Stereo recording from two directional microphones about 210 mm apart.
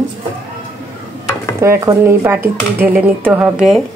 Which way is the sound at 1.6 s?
15° right (ahead or behind).